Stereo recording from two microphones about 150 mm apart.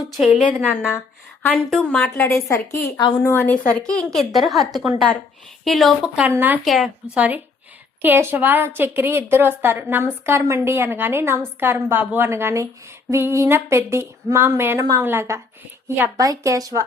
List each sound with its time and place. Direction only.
0.0 s a woman's voice: centre (ahead or behind)
0.9 s a woman's voice: 15° left (ahead or behind)
6.2 s a woman's voice: 10° right (ahead or behind)
6.7 s a woman's voice: centre (ahead or behind)
7.2 s a woman's voice: 10° right (ahead or behind)